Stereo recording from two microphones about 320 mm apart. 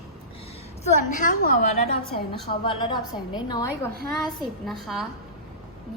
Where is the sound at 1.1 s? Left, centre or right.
Left.